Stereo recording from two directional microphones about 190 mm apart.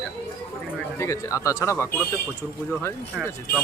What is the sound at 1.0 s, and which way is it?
Speech, 15° left (ahead or behind).